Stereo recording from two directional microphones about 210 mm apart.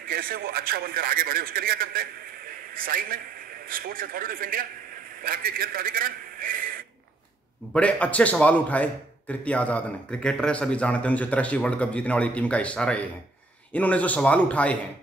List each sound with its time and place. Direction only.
0.1 s a man's voice: 45° right (ahead or behind)
7.7 s a man's voice: 5° left (ahead or behind)